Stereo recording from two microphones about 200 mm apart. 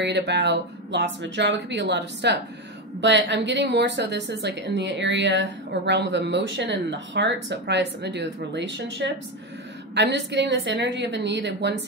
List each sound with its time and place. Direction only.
0.0 s a woman's voice: 60° right (ahead or behind)